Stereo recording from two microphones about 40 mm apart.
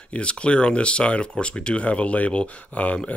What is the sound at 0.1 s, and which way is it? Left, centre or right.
Speech, left.